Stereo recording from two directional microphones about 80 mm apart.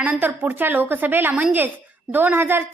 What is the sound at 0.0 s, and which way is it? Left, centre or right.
A woman's voice, right.